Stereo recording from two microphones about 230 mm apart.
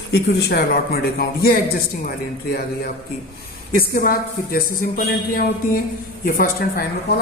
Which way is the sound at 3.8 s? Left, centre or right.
Left.